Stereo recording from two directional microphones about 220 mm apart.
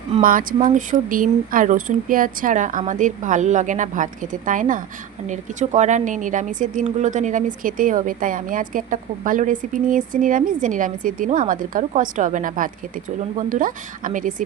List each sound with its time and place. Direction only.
0.2 s speech: 40° right (ahead or behind)